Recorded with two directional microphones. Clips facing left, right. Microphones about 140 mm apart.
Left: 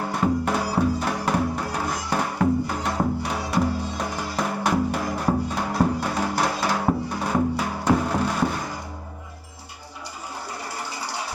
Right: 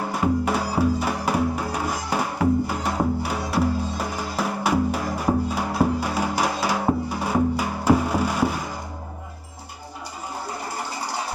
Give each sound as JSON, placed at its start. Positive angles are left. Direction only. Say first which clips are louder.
{"t": 0.1, "sound": "music", "louder": "right 1 dB", "side_deg": -5}